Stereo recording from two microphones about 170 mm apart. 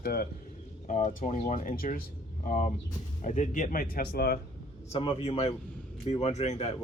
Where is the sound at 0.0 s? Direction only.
65° left (ahead or behind).